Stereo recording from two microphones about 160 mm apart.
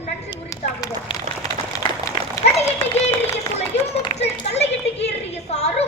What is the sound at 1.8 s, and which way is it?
Dog, 30° left (ahead or behind).